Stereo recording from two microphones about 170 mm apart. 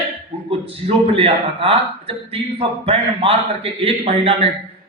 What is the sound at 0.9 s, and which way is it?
A man's voice, 35° right (ahead or behind).